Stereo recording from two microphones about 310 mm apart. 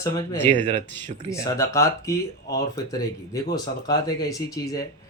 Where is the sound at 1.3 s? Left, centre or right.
Centre.